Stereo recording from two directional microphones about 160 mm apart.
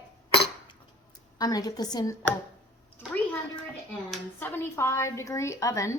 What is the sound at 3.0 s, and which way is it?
A woman's voice, 10° left (ahead or behind).